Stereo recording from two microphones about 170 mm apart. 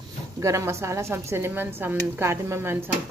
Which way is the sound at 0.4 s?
15° right (ahead or behind).